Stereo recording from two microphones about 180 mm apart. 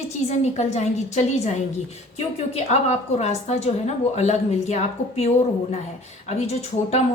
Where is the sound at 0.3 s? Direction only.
40° left (ahead or behind).